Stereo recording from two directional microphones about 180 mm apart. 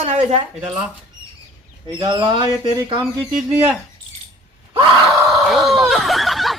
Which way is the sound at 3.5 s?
10° right (ahead or behind).